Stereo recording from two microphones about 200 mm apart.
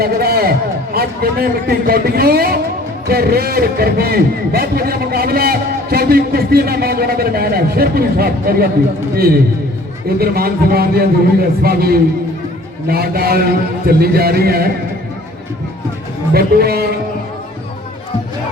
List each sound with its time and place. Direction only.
0.0 s a man's voice: 50° right (ahead or behind)
16.3 s a man's voice: 50° right (ahead or behind)